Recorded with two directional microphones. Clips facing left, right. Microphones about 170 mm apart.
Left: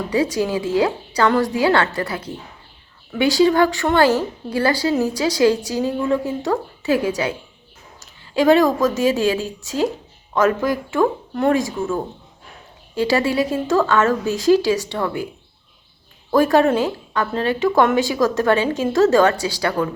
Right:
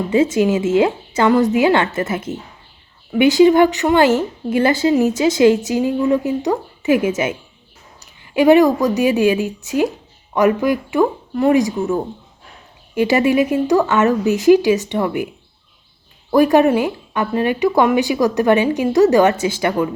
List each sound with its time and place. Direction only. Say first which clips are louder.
0.1 s speech: right 5 dB; 20° right (ahead or behind)
8.2 s speech: right 3 dB; 15° right (ahead or behind)
16.3 s speech: right 3 dB; 15° right (ahead or behind)